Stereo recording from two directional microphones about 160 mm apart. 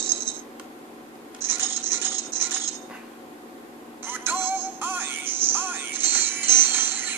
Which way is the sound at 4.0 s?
15° right (ahead or behind).